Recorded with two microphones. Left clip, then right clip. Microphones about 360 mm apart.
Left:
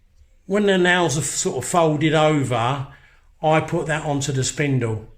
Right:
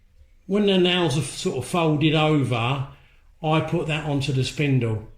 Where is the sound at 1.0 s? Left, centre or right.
Centre.